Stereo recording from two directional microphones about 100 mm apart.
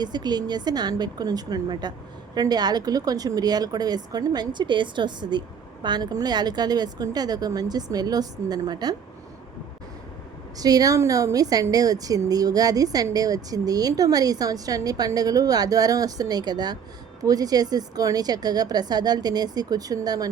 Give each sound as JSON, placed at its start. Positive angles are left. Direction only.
{"t": 0.0, "sound": "a woman's voice", "side_deg": -45}
{"t": 10.6, "sound": "a woman's voice", "side_deg": -40}